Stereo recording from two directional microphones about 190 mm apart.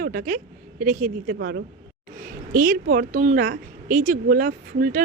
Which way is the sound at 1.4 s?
60° right (ahead or behind).